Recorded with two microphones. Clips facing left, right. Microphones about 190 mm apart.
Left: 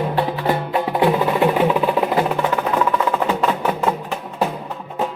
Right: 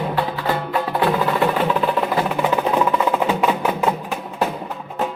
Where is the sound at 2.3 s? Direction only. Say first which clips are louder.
Right 1 dB; 15° right (ahead or behind).